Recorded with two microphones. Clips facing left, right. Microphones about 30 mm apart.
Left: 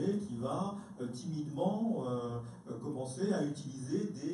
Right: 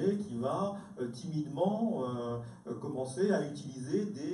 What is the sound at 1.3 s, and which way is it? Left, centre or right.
A man's voice, centre.